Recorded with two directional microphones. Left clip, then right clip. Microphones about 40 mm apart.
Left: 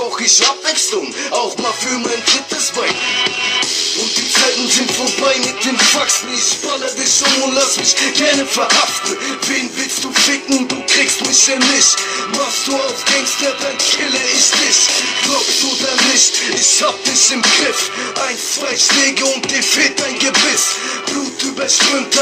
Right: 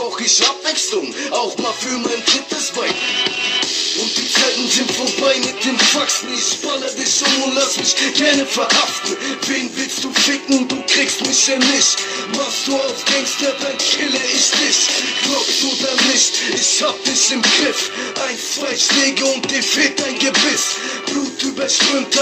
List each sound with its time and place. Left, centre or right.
0.3 s music: right
10.2 s music: right
21.7 s music: right